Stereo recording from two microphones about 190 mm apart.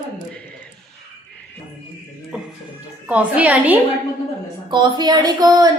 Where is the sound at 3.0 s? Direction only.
5° right (ahead or behind).